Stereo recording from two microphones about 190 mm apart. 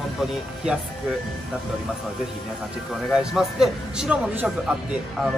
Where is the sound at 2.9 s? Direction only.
5° right (ahead or behind).